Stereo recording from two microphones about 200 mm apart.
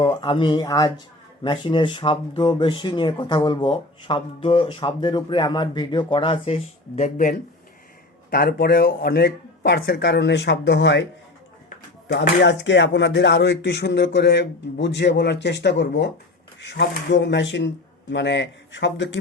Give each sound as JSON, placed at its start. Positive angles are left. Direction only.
{"t": 0.0, "sound": "speech", "side_deg": 25}
{"t": 8.3, "sound": "speech", "side_deg": 50}
{"t": 12.0, "sound": "speech", "side_deg": 65}